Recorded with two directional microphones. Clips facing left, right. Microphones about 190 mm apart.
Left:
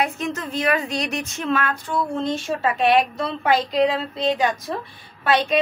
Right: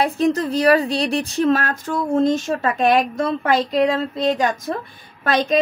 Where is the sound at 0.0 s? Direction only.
35° right (ahead or behind).